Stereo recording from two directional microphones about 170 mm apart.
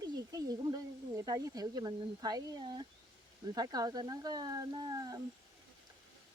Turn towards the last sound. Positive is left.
turn(degrees=-20)  # may be behind; listen again after turning